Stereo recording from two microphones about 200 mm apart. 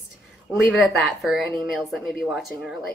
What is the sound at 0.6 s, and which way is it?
A woman's voice, centre (ahead or behind).